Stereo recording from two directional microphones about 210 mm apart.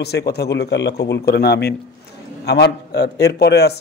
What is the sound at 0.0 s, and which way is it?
A man's voice, 50° left (ahead or behind).